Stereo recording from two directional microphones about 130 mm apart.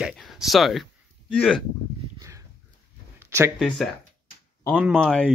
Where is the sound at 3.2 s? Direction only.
15° right (ahead or behind).